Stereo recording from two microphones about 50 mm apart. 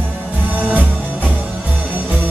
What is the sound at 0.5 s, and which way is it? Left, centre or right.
Music, right.